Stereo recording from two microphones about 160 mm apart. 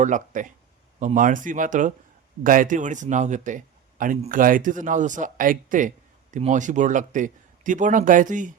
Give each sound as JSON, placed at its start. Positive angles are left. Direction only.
{"t": 0.0, "sound": "speech", "side_deg": -50}